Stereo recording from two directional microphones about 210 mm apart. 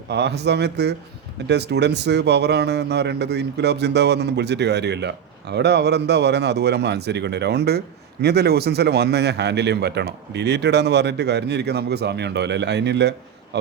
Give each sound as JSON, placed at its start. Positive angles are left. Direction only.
{"t": 0.1, "sound": "speech", "side_deg": -50}